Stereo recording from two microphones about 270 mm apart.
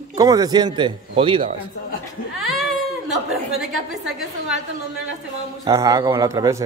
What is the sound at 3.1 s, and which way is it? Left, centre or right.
A woman's voice, centre.